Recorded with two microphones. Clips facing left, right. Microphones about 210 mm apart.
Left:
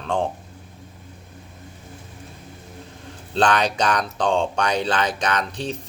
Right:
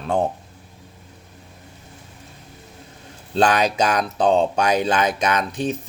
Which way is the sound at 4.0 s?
40° right (ahead or behind).